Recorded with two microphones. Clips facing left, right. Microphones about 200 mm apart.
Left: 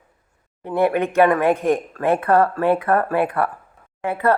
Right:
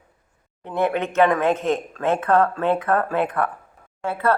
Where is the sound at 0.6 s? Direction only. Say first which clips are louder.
Left 4 dB; 10° left (ahead or behind).